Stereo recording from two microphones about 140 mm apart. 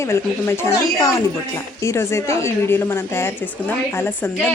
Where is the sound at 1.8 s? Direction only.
20° left (ahead or behind).